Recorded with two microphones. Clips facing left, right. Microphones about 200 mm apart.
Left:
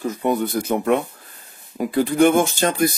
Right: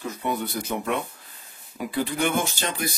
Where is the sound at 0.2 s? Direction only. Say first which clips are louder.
Left 7 dB; 50° left (ahead or behind).